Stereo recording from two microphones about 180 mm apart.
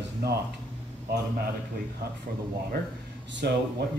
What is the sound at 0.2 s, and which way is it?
Speech, 60° right (ahead or behind).